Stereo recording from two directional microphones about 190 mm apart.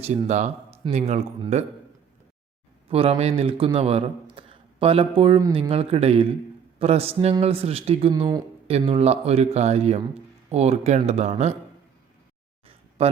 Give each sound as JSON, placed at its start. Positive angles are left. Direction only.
{"t": 0.0, "sound": "speech", "side_deg": -35}
{"t": 2.9, "sound": "speech", "side_deg": -30}
{"t": 8.1, "sound": "speech", "side_deg": -20}
{"t": 8.6, "sound": "speech", "side_deg": -30}